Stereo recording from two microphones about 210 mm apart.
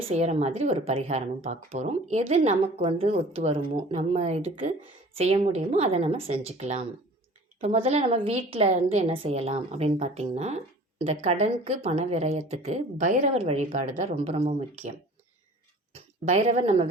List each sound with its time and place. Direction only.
0.1 s a woman's voice: 30° right (ahead or behind)
16.0 s speech: 30° right (ahead or behind)